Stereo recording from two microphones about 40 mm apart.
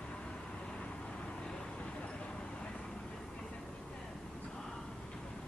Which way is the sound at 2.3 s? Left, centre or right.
Centre.